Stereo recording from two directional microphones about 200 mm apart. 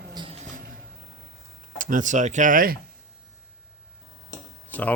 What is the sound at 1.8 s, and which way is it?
Speech, 40° right (ahead or behind).